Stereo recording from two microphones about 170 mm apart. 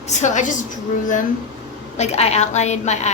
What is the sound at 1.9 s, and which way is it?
A woman's voice, 40° left (ahead or behind).